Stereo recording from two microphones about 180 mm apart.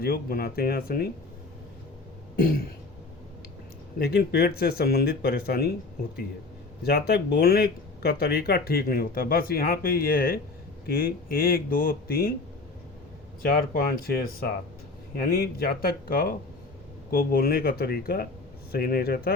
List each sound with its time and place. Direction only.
0.0 s speech: 55° left (ahead or behind)
3.9 s speech: 60° left (ahead or behind)
6.8 s speech: 60° left (ahead or behind)
13.4 s speech: 55° left (ahead or behind)